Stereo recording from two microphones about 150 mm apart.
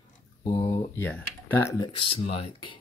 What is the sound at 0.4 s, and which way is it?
Speech, 25° left (ahead or behind).